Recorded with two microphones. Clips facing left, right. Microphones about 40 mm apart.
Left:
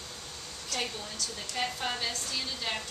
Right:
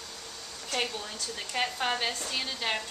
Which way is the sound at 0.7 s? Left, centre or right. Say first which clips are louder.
Right 3 dB; right.